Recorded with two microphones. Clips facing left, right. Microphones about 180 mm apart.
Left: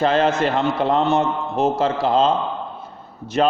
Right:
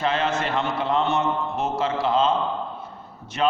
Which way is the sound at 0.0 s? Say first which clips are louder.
Left 6 dB; 35° left (ahead or behind).